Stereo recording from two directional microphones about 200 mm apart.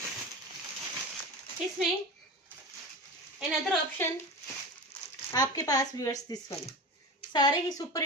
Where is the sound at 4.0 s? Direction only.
10° left (ahead or behind).